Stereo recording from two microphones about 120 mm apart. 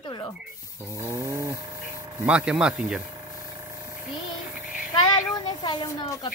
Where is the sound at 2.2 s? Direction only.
10° right (ahead or behind).